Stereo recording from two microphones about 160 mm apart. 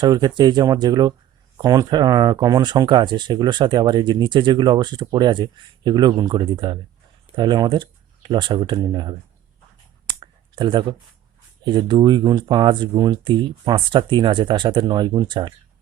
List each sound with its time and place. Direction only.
0.0 s speech: 25° right (ahead or behind)
10.1 s a sound: 30° right (ahead or behind)
11.6 s speech: 30° right (ahead or behind)